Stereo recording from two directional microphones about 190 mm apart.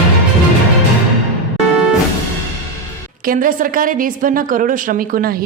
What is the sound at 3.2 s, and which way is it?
A woman's voice, 45° right (ahead or behind).